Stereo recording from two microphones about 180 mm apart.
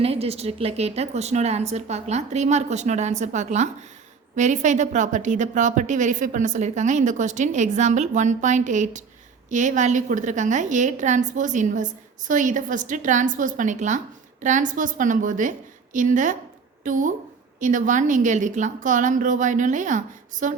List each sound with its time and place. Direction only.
0.0 s a woman's voice: 35° right (ahead or behind)